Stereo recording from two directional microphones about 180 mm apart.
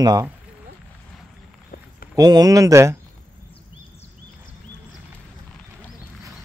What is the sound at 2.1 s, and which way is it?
Speech, 20° right (ahead or behind).